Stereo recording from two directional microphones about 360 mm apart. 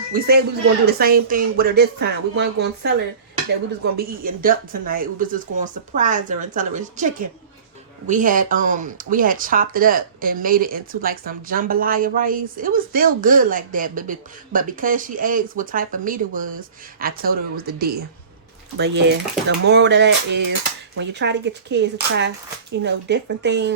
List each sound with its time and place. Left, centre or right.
0.1 s speech: right
3.9 s speech: right